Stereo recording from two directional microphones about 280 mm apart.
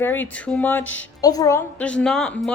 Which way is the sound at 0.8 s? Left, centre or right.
Left.